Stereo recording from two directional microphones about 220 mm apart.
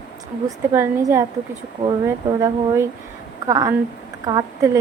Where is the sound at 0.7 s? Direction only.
10° right (ahead or behind).